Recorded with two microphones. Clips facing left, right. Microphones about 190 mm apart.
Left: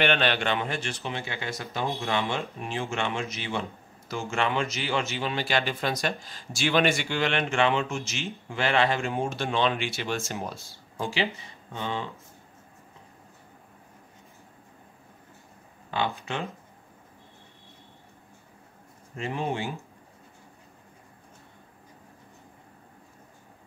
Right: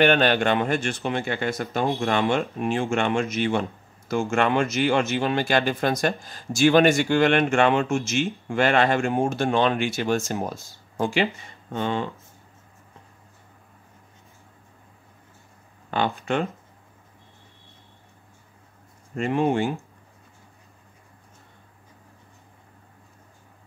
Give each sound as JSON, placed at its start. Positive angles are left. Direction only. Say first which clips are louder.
{"t": 0.0, "sound": "speech", "louder": "right 6 dB", "side_deg": -45}
{"t": 15.9, "sound": "speech", "louder": "right 5 dB", "side_deg": -55}
{"t": 19.1, "sound": "speech", "louder": "right 8 dB", "side_deg": -55}